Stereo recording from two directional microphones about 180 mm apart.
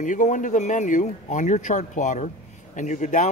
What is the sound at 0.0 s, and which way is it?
Speech, 45° left (ahead or behind).